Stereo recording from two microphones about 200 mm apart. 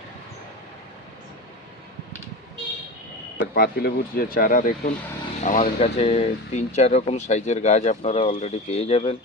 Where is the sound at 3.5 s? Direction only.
50° left (ahead or behind).